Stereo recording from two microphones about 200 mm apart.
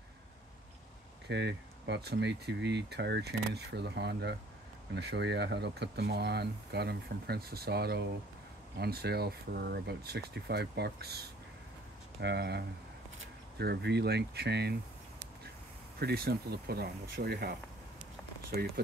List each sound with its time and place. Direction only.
1.2 s speech: 60° right (ahead or behind)
16.0 s speech: 50° right (ahead or behind)